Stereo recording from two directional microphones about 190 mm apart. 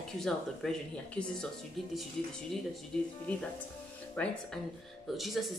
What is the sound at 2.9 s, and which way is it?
Speech, 5° left (ahead or behind).